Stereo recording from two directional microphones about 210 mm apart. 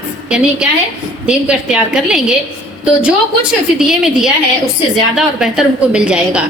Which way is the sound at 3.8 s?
Centre (ahead or behind).